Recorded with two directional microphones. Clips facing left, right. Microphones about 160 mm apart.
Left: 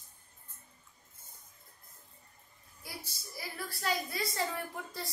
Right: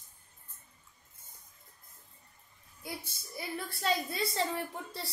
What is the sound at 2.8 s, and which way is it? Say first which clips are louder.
A woman's voice: right 4 dB; 20° right (ahead or behind).